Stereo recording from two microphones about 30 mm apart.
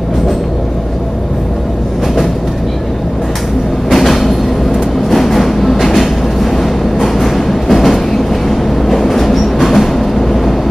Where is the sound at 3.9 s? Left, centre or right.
Centre.